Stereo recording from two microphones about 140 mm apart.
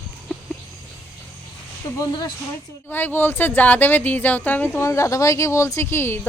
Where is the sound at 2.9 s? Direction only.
15° left (ahead or behind).